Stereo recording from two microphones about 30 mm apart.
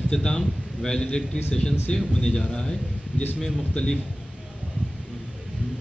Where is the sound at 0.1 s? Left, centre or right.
Left.